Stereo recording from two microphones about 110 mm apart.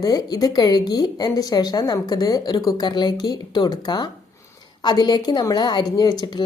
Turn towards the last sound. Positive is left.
turn(degrees=40)  # may be behind; listen again after turning